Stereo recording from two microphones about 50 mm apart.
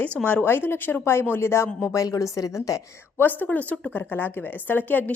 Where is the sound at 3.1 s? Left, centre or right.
Left.